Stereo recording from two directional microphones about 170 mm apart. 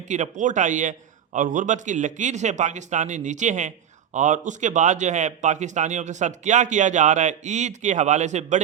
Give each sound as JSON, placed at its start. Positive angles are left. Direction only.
{"t": 0.1, "sound": "speech", "side_deg": -45}